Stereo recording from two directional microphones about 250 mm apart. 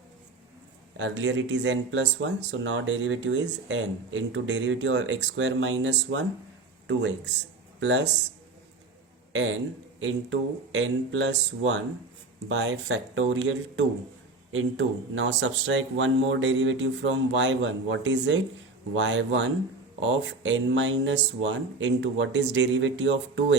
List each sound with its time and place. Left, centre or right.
0.9 s speech: right
9.3 s a man's voice: right